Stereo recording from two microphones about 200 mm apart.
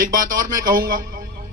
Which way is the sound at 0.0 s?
45° right (ahead or behind).